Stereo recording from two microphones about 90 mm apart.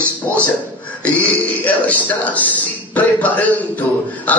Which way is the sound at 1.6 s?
15° left (ahead or behind).